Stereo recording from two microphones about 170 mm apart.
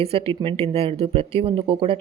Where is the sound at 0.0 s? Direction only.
35° right (ahead or behind).